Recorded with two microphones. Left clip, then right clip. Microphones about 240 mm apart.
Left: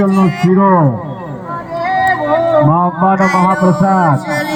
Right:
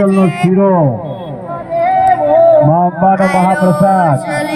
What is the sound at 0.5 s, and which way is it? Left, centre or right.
Speech, left.